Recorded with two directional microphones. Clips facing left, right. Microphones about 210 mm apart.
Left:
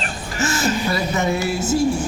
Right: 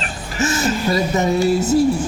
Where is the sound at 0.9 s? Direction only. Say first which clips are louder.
Right 3 dB; 35° right (ahead or behind).